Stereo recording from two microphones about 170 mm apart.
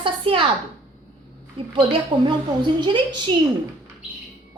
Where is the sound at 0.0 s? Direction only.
30° right (ahead or behind).